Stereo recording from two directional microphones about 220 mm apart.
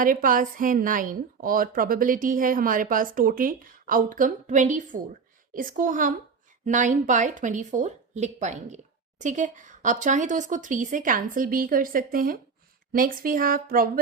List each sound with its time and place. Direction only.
0.0 s speech: 40° right (ahead or behind)